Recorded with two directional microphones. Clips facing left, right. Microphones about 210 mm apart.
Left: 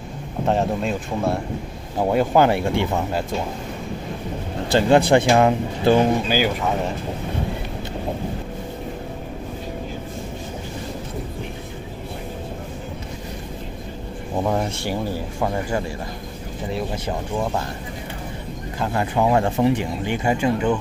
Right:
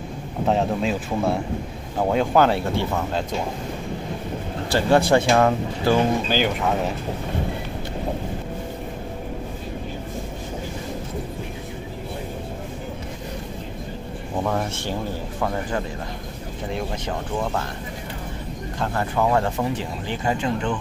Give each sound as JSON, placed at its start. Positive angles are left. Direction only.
{"t": 0.5, "sound": "speech", "side_deg": 0}
{"t": 4.6, "sound": "speech", "side_deg": 20}
{"t": 6.2, "sound": "speech", "side_deg": 5}
{"t": 14.4, "sound": "speech", "side_deg": 15}
{"t": 17.4, "sound": "speech", "side_deg": 15}
{"t": 18.9, "sound": "speech", "side_deg": 15}